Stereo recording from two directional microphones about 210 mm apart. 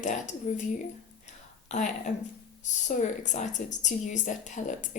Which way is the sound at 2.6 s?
35° left (ahead or behind).